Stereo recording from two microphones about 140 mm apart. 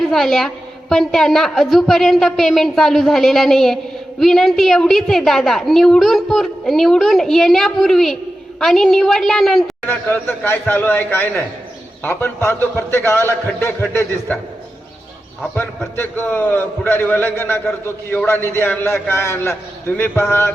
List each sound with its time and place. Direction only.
0.0 s a woman's voice: centre (ahead or behind)
9.8 s a man's voice: 15° left (ahead or behind)
16.0 s a man's voice: 15° left (ahead or behind)